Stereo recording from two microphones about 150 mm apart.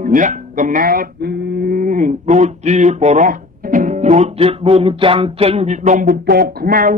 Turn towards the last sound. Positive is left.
turn(degrees=-80)